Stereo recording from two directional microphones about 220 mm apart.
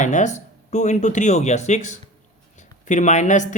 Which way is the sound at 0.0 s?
35° left (ahead or behind).